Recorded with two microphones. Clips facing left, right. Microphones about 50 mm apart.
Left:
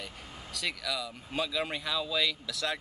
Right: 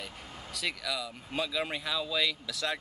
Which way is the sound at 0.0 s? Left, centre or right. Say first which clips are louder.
Even; centre.